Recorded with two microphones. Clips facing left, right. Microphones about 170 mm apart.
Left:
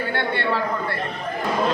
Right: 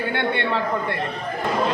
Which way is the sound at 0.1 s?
20° right (ahead or behind).